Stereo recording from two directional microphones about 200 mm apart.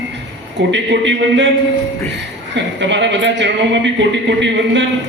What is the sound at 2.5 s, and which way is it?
A man's voice, 60° right (ahead or behind).